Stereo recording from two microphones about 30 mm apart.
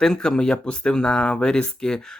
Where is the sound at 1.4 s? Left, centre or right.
Left.